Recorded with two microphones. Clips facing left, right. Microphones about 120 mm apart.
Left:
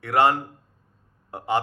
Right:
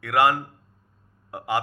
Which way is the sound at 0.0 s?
30° left (ahead or behind).